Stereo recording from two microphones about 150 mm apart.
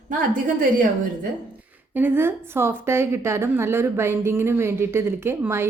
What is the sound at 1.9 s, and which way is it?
A woman's voice, 15° right (ahead or behind).